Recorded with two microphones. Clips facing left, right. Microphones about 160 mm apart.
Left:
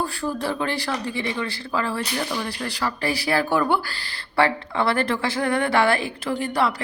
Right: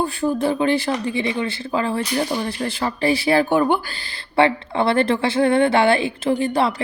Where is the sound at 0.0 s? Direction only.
20° right (ahead or behind).